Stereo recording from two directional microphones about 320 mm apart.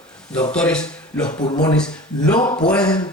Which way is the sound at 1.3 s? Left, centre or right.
Left.